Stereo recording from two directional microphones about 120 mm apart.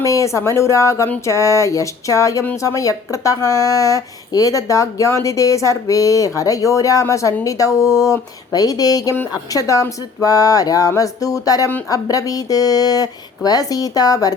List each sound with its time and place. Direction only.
0.0 s speech: 25° left (ahead or behind)